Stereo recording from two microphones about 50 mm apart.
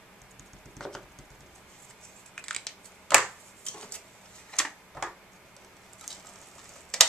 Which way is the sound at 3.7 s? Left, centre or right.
Centre.